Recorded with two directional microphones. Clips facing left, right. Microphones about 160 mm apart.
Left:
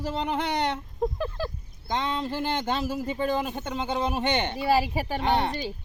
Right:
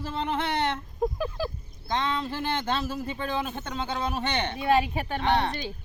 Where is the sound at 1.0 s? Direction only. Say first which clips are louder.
Even; 10° right (ahead or behind).